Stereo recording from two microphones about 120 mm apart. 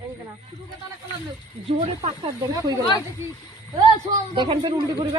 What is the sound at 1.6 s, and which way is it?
Speech, 60° right (ahead or behind).